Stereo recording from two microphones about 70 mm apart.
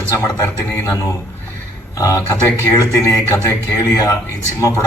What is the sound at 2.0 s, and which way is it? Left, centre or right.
A man's voice, left.